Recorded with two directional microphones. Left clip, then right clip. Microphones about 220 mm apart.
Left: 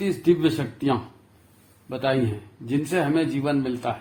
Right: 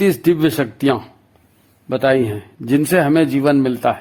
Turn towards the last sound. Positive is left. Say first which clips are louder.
# right 10 dB
turn(degrees=-45)  # may be behind; listen again after turning